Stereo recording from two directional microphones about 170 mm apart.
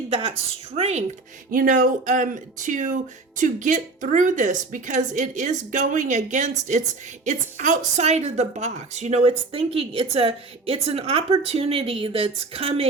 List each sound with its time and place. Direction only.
0.1 s a woman's voice: 35° right (ahead or behind)
1.5 s a woman's voice: 55° right (ahead or behind); by 12.9 s 35° right (ahead or behind)